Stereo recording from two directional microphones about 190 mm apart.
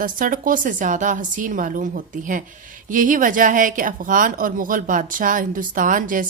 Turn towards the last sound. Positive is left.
turn(degrees=-45)  # may be behind; listen again after turning